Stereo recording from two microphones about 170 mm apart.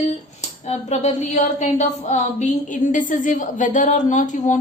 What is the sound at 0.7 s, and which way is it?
A woman's voice, 40° left (ahead or behind).